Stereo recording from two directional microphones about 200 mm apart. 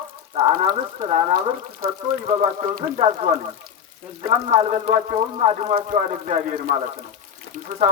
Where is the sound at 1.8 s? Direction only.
45° right (ahead or behind).